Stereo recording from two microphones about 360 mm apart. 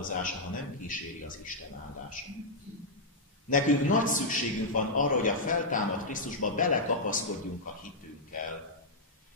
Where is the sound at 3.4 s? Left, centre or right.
Left.